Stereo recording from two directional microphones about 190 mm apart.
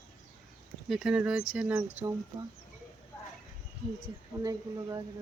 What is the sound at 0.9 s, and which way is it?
Speech, 5° right (ahead or behind).